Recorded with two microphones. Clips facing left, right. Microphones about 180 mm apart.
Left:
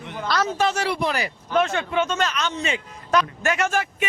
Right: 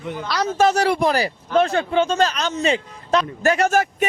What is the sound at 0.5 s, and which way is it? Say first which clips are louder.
A man's voice: right 6 dB; 40° right (ahead or behind).